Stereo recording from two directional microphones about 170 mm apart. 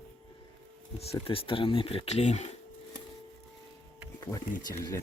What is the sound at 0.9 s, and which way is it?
Speech, 35° left (ahead or behind).